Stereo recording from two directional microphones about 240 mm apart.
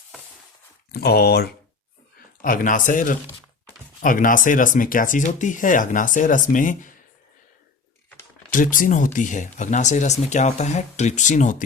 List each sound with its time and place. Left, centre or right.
0.9 s speech: left
8.4 s speech: left